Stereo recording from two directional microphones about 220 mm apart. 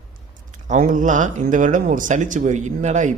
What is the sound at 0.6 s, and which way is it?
A man's voice, 35° right (ahead or behind).